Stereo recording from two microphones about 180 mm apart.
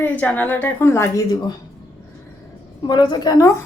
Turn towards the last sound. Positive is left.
turn(degrees=20)  # may be behind; listen again after turning